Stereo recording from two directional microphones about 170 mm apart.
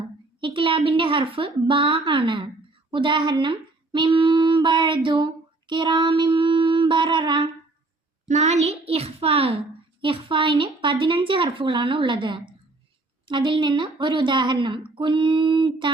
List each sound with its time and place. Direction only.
0.3 s a woman's voice: 30° right (ahead or behind)
8.3 s a woman's voice: 40° right (ahead or behind)